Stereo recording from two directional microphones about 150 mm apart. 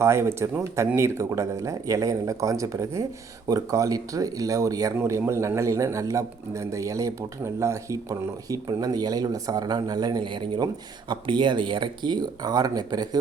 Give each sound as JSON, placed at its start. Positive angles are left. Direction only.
{"t": 0.0, "sound": "speech", "side_deg": -20}